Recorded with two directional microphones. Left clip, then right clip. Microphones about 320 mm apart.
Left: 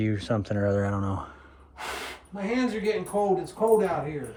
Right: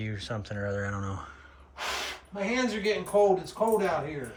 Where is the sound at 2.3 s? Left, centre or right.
Centre.